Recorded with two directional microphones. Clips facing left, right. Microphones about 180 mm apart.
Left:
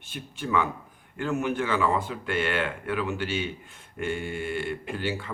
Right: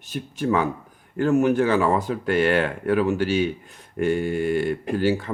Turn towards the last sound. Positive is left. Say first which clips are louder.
# right 9 dB
turn(degrees=-40)  # may be behind; listen again after turning